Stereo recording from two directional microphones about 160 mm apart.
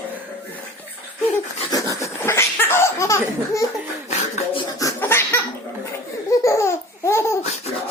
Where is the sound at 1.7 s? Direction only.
20° left (ahead or behind).